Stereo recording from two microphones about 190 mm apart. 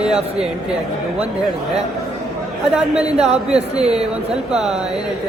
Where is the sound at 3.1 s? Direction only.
35° right (ahead or behind).